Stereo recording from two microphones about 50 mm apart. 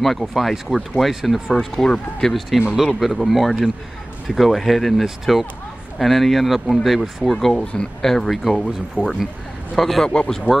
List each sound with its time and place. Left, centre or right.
0.0 s speech: centre
1.9 s speech: centre
2.6 s speech: centre
2.9 s speech: centre
7.3 s speech: centre
8.0 s speech: centre
10.0 s speech: centre